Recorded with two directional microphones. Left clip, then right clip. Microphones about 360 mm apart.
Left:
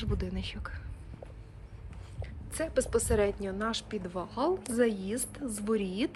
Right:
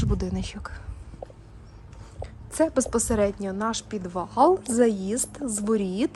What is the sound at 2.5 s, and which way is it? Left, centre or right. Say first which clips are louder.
Speech: right 6 dB; centre.